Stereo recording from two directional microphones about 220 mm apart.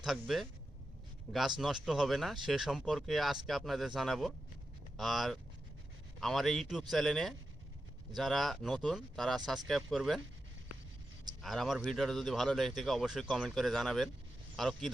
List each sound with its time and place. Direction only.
0.0 s speech: centre (ahead or behind)
11.4 s speech: centre (ahead or behind)